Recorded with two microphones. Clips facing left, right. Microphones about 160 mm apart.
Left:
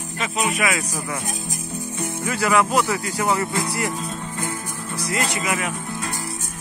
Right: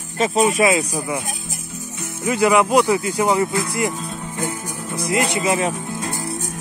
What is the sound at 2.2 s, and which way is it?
Speech, 20° right (ahead or behind).